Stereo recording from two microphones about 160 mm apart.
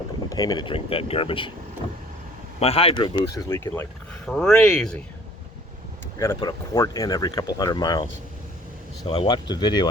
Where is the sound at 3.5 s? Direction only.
15° left (ahead or behind).